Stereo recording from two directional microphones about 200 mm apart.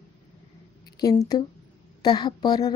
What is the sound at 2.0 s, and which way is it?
Speech, 20° left (ahead or behind).